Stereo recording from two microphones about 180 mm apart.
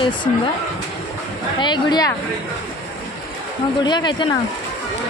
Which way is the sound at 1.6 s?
25° left (ahead or behind).